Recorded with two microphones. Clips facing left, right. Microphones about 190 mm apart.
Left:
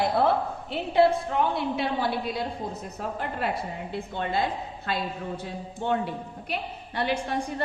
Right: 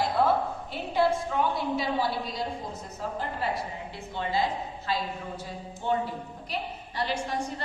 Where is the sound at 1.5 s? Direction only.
60° left (ahead or behind).